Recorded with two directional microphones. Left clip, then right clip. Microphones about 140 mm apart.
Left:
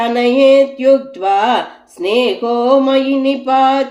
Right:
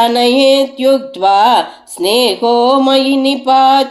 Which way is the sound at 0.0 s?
15° right (ahead or behind).